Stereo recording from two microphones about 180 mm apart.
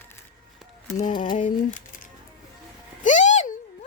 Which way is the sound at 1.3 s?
45° left (ahead or behind).